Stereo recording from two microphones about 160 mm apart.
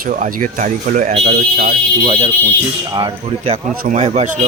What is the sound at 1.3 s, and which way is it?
Speech, 65° right (ahead or behind).